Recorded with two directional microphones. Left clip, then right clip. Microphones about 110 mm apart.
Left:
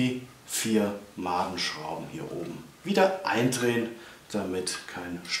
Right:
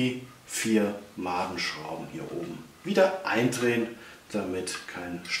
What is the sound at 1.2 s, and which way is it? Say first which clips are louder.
Speech: left 1 dB; 15° left (ahead or behind).